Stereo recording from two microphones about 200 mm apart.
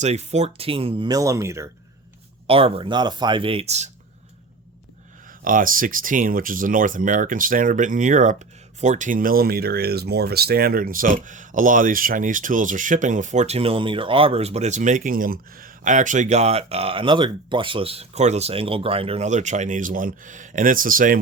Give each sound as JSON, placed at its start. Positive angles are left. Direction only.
{"t": 0.0, "sound": "speech", "side_deg": -35}
{"t": 2.5, "sound": "speech", "side_deg": -25}
{"t": 5.4, "sound": "speech", "side_deg": -45}